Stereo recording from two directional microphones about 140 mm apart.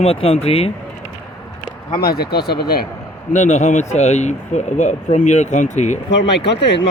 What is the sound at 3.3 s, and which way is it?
Speech, 60° left (ahead or behind).